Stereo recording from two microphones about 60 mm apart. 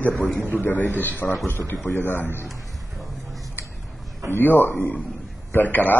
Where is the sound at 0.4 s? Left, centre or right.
Left.